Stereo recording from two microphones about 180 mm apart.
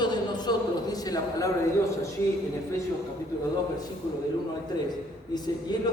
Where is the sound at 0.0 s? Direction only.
25° left (ahead or behind).